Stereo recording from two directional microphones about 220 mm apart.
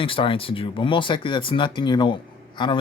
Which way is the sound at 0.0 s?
25° left (ahead or behind).